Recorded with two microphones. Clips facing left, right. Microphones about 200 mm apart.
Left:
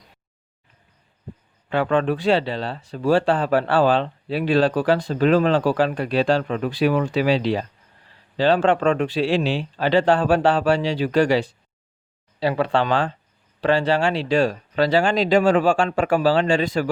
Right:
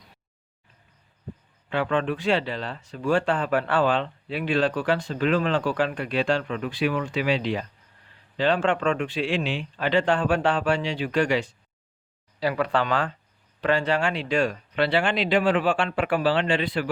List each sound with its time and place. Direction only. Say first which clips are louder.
1.7 s speech: left 5 dB; 40° left (ahead or behind)